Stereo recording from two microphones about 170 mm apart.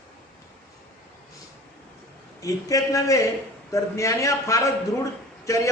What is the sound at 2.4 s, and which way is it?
A man's voice, 20° left (ahead or behind).